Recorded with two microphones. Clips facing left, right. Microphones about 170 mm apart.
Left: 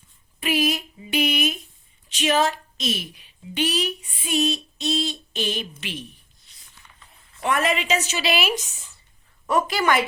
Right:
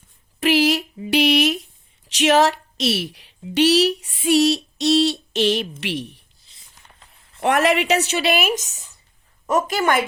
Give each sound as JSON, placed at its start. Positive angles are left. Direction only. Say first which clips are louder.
{"t": 0.3, "sound": "a sound", "louder": "right 6 dB", "side_deg": -80}
{"t": 2.0, "sound": "a woman's voice", "louder": "right 5 dB", "side_deg": -80}
{"t": 7.4, "sound": "a woman's voice", "louder": "right 5 dB", "side_deg": -75}